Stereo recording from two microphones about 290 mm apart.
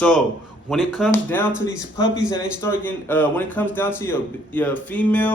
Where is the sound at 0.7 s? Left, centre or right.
Centre.